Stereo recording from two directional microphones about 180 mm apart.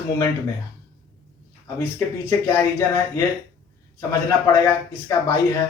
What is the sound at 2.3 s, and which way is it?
Speech, 15° left (ahead or behind).